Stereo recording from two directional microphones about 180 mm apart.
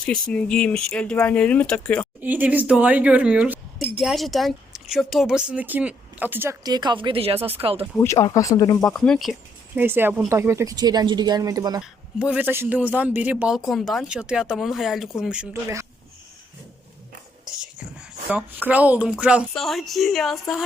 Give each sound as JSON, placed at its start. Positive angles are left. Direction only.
{"t": 0.0, "sound": "a man's voice", "side_deg": 5}
{"t": 2.2, "sound": "speech", "side_deg": -10}
{"t": 7.3, "sound": "speech", "side_deg": -10}
{"t": 7.6, "sound": "speech", "side_deg": -30}
{"t": 7.9, "sound": "speech", "side_deg": 15}
{"t": 8.8, "sound": "a man's voice", "side_deg": 5}
{"t": 9.7, "sound": "speech", "side_deg": -10}
{"t": 11.8, "sound": "a man's voice", "side_deg": -5}
{"t": 18.3, "sound": "a man's voice", "side_deg": -10}